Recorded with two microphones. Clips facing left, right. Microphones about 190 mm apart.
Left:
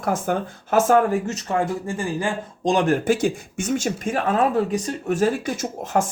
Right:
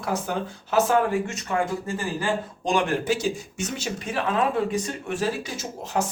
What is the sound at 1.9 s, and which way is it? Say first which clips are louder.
Speech: left 2 dB; 15° left (ahead or behind).